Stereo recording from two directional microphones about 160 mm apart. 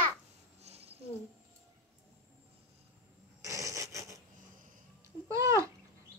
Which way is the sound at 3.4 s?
20° right (ahead or behind).